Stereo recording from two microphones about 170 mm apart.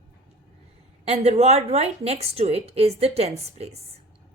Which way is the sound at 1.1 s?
40° right (ahead or behind).